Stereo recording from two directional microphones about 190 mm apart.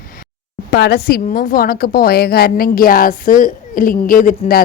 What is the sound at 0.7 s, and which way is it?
A woman's voice, 60° left (ahead or behind).